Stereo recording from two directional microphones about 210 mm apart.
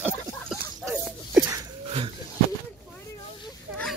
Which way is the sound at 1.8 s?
25° right (ahead or behind).